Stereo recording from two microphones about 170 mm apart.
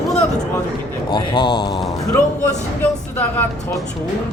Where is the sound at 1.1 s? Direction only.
30° left (ahead or behind).